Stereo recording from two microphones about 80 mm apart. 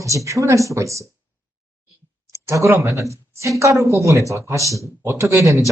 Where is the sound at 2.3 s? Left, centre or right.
Right.